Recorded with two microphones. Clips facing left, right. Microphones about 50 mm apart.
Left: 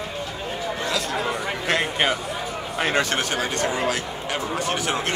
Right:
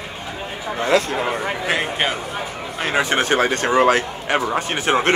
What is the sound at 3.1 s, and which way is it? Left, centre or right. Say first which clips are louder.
A man's voice: right 6 dB; right.